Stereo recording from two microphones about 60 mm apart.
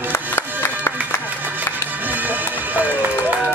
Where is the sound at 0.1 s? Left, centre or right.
Left.